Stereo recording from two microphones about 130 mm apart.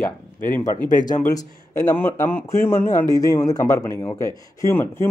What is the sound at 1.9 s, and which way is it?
Speech, 15° left (ahead or behind).